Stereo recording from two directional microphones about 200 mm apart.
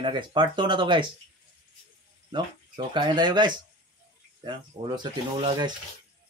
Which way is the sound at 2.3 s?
25° right (ahead or behind).